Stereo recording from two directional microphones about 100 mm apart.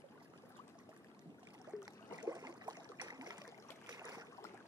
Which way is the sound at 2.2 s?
40° right (ahead or behind).